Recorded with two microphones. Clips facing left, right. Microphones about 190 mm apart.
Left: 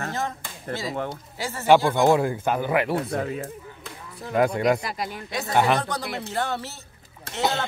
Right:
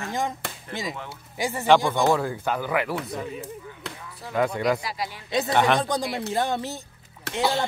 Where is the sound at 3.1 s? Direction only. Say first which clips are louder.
Left 5 dB; 65° left (ahead or behind).